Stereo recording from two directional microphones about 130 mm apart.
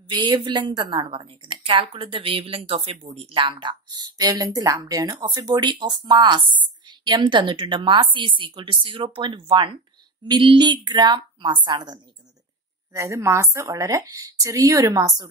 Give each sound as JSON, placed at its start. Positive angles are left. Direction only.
{"t": 0.1, "sound": "a woman's voice", "side_deg": -35}
{"t": 12.9, "sound": "speech", "side_deg": -20}